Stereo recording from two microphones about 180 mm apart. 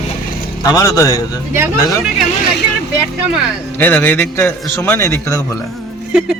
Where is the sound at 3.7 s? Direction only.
10° left (ahead or behind).